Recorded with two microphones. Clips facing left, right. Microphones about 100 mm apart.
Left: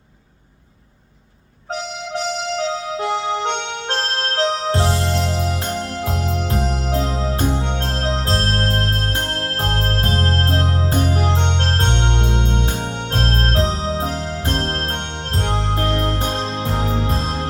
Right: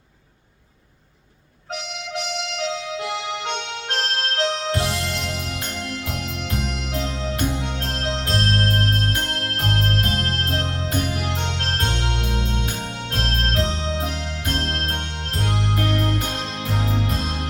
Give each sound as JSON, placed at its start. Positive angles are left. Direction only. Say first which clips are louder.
{"t": 2.1, "sound": "music", "louder": "left 6 dB", "side_deg": 35}